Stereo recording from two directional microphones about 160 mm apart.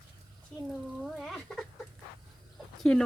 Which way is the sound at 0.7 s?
Centre (ahead or behind).